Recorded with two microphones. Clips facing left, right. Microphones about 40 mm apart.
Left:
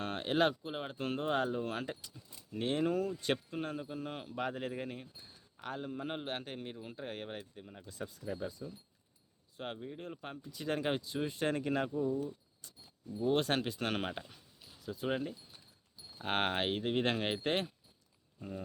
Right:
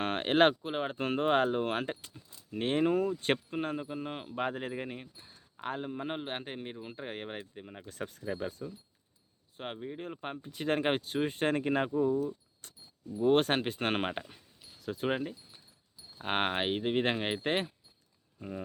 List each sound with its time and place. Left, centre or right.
0.0 s speech: right
9.6 s speech: right
13.5 s speech: right
15.2 s keys jangling: centre
16.1 s speech: centre